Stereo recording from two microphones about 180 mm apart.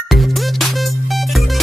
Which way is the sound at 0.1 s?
Centre (ahead or behind).